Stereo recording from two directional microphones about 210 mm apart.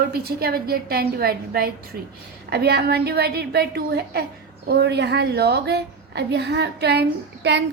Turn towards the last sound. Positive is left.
turn(degrees=-50)  # may be behind; listen again after turning